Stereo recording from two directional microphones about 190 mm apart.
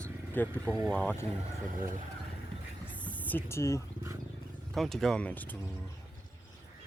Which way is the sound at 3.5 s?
15° left (ahead or behind).